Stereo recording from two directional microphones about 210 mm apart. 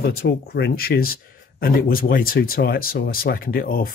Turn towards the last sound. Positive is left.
turn(degrees=45)  # may be behind; listen again after turning